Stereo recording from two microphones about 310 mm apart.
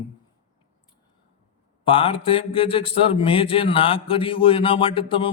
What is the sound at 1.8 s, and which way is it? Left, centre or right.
Speech, centre.